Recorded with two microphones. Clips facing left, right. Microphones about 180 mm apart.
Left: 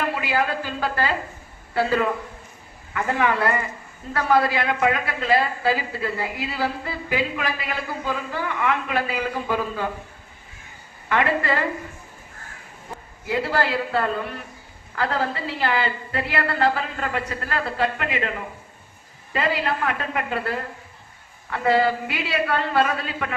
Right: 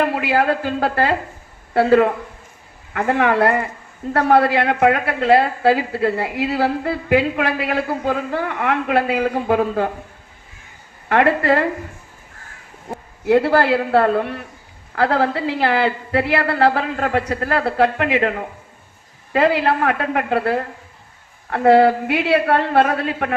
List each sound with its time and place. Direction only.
0.0 s a woman's voice: 60° right (ahead or behind)
11.1 s a woman's voice: 55° right (ahead or behind)
12.9 s a woman's voice: 60° right (ahead or behind)